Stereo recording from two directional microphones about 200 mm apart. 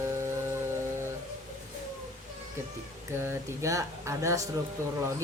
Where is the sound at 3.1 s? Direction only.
15° right (ahead or behind).